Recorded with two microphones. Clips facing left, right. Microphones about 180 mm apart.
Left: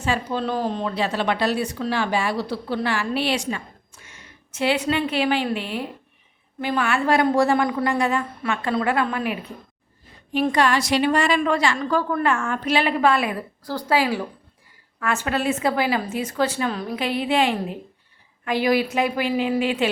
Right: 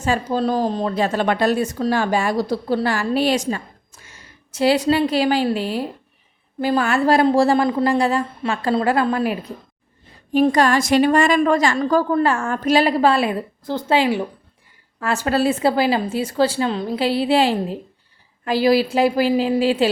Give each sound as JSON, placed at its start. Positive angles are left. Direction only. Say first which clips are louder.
{"t": 0.0, "sound": "a woman's voice", "louder": "right 4 dB", "side_deg": -40}
{"t": 14.9, "sound": "a woman's voice", "louder": "right 4 dB", "side_deg": -35}